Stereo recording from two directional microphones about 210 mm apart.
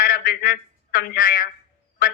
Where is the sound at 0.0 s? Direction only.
40° left (ahead or behind).